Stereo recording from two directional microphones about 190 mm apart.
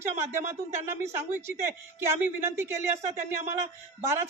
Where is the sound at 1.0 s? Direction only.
15° right (ahead or behind).